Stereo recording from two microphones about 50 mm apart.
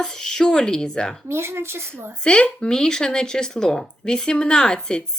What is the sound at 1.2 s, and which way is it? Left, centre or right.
Speech, right.